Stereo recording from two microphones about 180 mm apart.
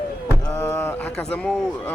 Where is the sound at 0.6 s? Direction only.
15° left (ahead or behind).